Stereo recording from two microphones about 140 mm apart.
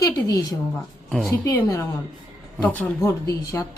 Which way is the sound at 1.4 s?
20° left (ahead or behind).